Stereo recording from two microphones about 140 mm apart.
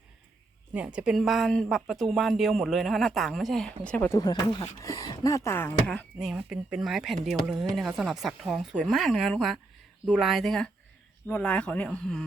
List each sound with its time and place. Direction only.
0.9 s speech: 5° right (ahead or behind); by 4.2 s 10° left (ahead or behind)
4.2 s speech: 30° left (ahead or behind); by 6.1 s 15° left (ahead or behind)
6.1 s speech: 5° right (ahead or behind)